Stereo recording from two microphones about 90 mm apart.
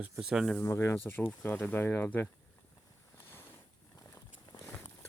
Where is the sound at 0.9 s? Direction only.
20° left (ahead or behind).